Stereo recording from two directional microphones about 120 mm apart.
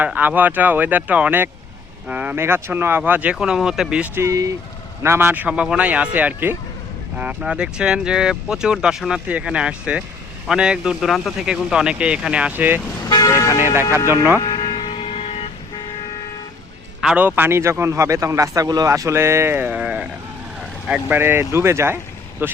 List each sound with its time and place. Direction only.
0.0 s speech: 15° right (ahead or behind)
4.2 s a man's voice: 25° right (ahead or behind)
13.1 s speech: 30° left (ahead or behind)
14.4 s a sound: 35° left (ahead or behind); by 15.4 s 55° left (ahead or behind)
17.0 s a man's voice: 10° right (ahead or behind)